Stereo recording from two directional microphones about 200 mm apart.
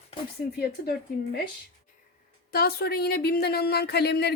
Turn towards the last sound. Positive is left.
turn(degrees=55)  # may be behind; listen again after turning